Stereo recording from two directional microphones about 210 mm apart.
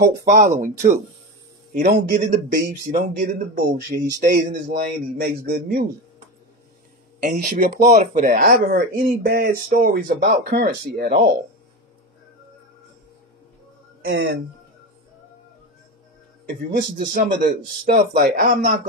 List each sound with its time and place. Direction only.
0.0 s speech: 45° right (ahead or behind)
7.3 s speech: 35° right (ahead or behind)
14.0 s speech: 50° right (ahead or behind)
16.4 s speech: 45° right (ahead or behind)